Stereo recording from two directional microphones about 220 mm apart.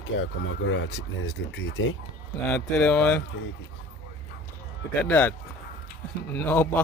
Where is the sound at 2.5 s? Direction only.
5° left (ahead or behind).